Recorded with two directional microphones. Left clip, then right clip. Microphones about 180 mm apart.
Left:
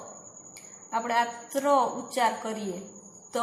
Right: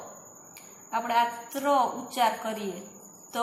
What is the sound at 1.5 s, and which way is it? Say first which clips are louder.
Speech: left 2 dB; 40° left (ahead or behind).